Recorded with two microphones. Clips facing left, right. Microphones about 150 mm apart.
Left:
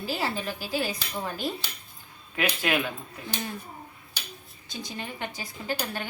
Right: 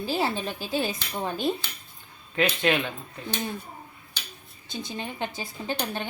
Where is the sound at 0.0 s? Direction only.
25° right (ahead or behind).